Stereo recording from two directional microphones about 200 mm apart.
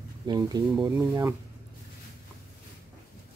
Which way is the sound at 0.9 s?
10° right (ahead or behind).